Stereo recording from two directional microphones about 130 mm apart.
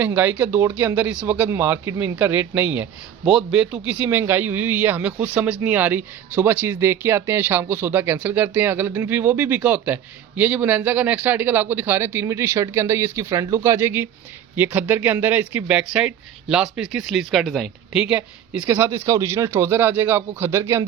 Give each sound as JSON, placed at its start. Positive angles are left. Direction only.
{"t": 0.0, "sound": "speech", "side_deg": -15}
{"t": 18.7, "sound": "speech", "side_deg": -20}